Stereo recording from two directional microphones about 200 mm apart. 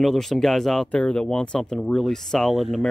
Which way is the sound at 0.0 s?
Centre (ahead or behind).